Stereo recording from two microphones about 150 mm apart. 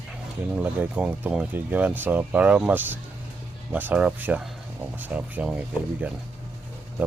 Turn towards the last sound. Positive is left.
turn(degrees=-10)  # may be behind; listen again after turning